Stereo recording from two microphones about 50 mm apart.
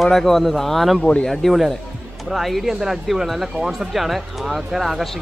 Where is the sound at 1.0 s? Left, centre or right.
Left.